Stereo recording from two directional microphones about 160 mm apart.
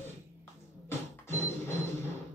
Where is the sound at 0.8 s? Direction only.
15° left (ahead or behind).